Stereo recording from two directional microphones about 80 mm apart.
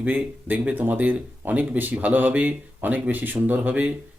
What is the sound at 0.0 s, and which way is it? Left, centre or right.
Speech, right.